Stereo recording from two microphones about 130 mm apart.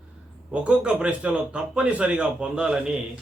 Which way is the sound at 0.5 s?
10° right (ahead or behind).